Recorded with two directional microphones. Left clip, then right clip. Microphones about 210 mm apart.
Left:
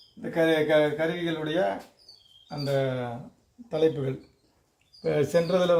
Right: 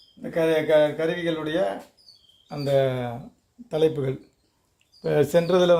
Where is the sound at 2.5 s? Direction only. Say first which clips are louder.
Right 5 dB; 50° right (ahead or behind).